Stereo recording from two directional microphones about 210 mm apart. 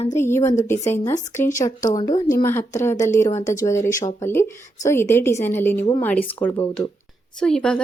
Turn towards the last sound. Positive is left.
turn(degrees=5)  # may be behind; listen again after turning